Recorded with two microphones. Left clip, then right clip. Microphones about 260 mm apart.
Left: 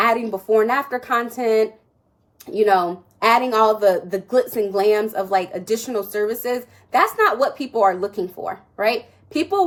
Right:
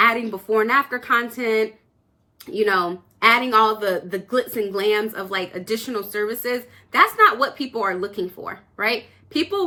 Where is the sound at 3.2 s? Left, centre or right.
Centre.